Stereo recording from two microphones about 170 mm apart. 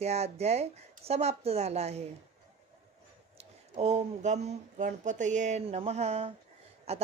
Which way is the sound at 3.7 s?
40° right (ahead or behind).